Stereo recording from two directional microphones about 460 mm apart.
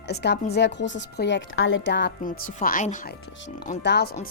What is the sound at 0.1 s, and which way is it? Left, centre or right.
Speech, left.